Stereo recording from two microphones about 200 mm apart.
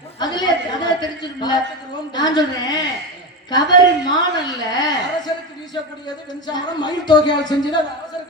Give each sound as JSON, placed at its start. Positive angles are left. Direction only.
{"t": 0.2, "sound": "a sound", "side_deg": 20}
{"t": 2.1, "sound": "a woman's voice", "side_deg": 20}
{"t": 6.5, "sound": "a woman's voice", "side_deg": 20}